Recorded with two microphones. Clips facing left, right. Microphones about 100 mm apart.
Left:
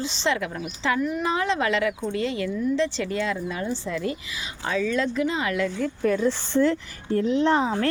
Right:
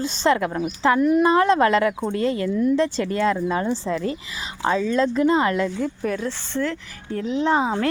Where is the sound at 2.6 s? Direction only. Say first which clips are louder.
Right 4 dB; 55° right (ahead or behind); by 5.6 s 35° right (ahead or behind).